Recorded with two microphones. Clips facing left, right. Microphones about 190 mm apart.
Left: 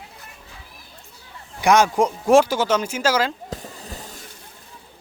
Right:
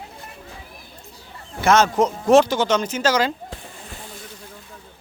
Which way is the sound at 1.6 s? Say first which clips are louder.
Even; 15° left (ahead or behind).